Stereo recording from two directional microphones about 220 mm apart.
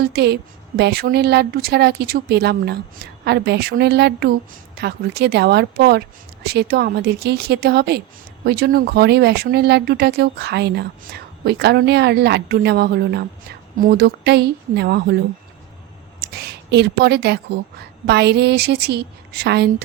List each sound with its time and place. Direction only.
0.0 s speech: 50° right (ahead or behind)
16.2 s speech: 45° right (ahead or behind)